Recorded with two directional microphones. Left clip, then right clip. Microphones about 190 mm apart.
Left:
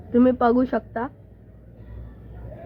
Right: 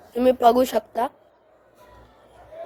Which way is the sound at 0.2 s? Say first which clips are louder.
Right 2 dB; 40° right (ahead or behind).